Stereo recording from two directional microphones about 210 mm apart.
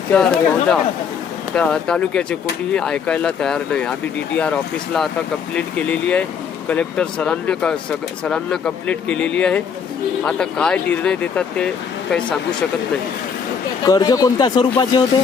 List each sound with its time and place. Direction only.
0.1 s speech: 5° left (ahead or behind)
13.8 s speech: 15° left (ahead or behind)